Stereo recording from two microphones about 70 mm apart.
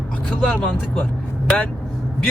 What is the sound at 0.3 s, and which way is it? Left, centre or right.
Speech, centre.